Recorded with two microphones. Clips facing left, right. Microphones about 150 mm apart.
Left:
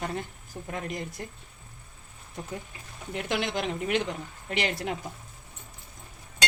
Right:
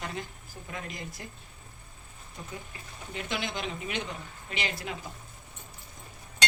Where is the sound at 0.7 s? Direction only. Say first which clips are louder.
Left 6 dB; 55° left (ahead or behind).